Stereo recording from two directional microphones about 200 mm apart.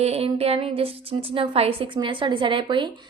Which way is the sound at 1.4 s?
30° right (ahead or behind).